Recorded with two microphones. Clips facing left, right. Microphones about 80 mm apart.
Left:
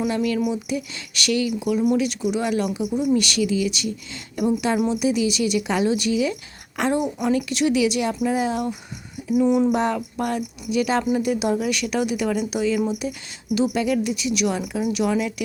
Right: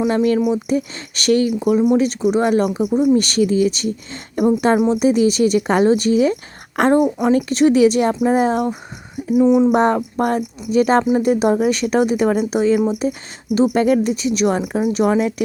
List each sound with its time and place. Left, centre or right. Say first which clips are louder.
0.1 s a woman's voice: right 6 dB; right
7.2 s speech: right 6 dB; right
9.4 s a sound: right 5 dB; right
9.7 s speech: right 7 dB; right